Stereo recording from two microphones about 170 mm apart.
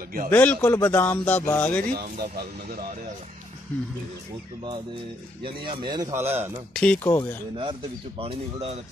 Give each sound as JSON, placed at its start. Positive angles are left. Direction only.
{"t": 0.3, "sound": "speech", "side_deg": 10}
{"t": 2.1, "sound": "speech", "side_deg": -65}
{"t": 5.4, "sound": "a man's voice", "side_deg": -25}
{"t": 6.7, "sound": "speech", "side_deg": 5}
{"t": 8.2, "sound": "speech", "side_deg": -35}